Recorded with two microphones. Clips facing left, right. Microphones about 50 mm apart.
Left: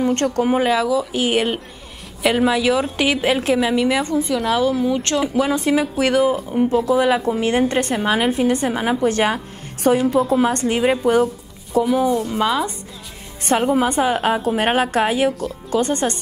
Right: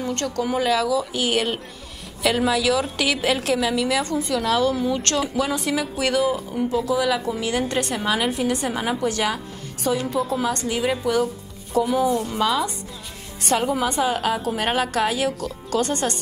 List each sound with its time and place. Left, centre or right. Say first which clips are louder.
0.0 s a woman's voice: left 7 dB; left; by 5.2 s centre
5.2 s a woman's voice: left 5 dB; left
9.1 s speech: left 5 dB; left
10.0 s speech: left 7 dB; centre
10.4 s speech: left 6 dB; left
11.7 s speech: left 3 dB; centre
12.4 s a woman's voice: left 2 dB; centre
13.8 s speech: left 4 dB; left
14.3 s a woman's voice: left 5 dB; centre
14.6 s a woman's voice: left 3 dB; left